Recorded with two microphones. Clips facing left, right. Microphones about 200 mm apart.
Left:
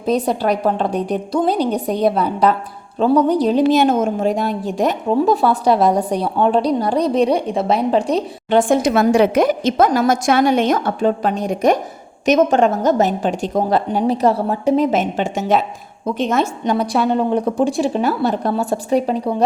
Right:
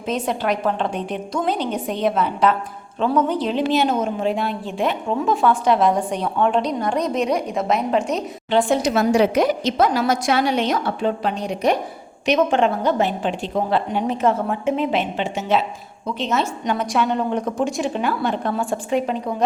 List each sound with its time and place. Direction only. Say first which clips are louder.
0.0 s a woman's voice: left 5 dB; 35° left (ahead or behind)
8.4 s a woman's voice: left 4 dB; 50° left (ahead or behind)
16.7 s a woman's voice: left 4 dB; 35° left (ahead or behind)